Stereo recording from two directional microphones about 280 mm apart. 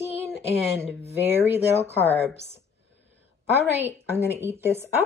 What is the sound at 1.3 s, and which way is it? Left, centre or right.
A woman's voice, centre.